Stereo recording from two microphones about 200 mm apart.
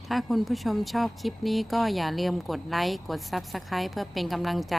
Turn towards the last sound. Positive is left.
turn(degrees=0)  # may be behind; listen again after turning